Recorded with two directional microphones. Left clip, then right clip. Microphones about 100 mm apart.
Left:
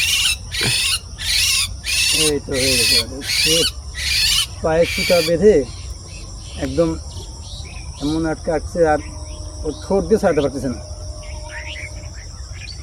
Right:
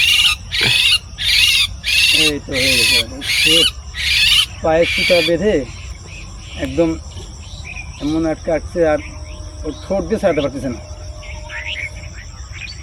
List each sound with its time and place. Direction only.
0.0 s owl: 25° left (ahead or behind)
2.5 s speech: 25° left (ahead or behind)
6.7 s speech: 25° left (ahead or behind)
7.9 s cricket: 25° left (ahead or behind)
8.2 s speech: 5° left (ahead or behind)
8.8 s cricket: 15° left (ahead or behind)
9.9 s speech: 15° left (ahead or behind)